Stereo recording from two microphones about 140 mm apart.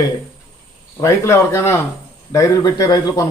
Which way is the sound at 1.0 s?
20° left (ahead or behind).